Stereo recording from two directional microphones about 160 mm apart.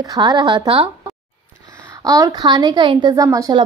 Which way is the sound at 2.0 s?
20° right (ahead or behind).